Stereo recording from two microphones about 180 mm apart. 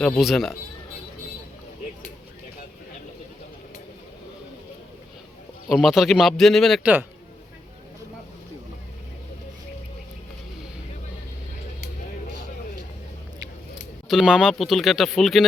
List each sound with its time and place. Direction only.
0.0 s speech: centre (ahead or behind)
5.6 s speech: centre (ahead or behind)
14.1 s speech: 5° right (ahead or behind)